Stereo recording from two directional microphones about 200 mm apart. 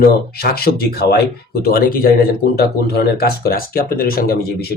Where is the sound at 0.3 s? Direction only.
50° left (ahead or behind).